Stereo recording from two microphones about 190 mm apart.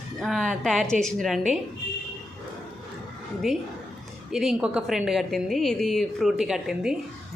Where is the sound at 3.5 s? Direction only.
5° right (ahead or behind).